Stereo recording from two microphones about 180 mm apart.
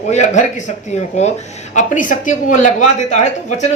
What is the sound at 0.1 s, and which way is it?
A woman's voice, 40° left (ahead or behind).